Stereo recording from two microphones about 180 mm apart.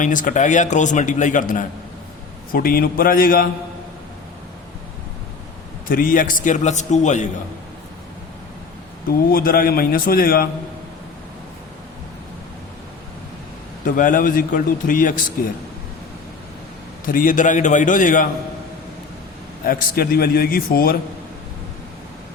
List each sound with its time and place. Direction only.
0.0 s speech: 45° left (ahead or behind)
5.9 s speech: 50° left (ahead or behind)
9.0 s speech: 55° left (ahead or behind)
13.8 s speech: 45° left (ahead or behind)
17.1 s speech: 50° left (ahead or behind)
19.6 s a man's voice: 60° left (ahead or behind)